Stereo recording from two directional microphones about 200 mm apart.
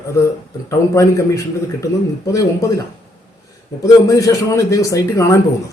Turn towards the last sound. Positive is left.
turn(degrees=15)  # may be behind; listen again after turning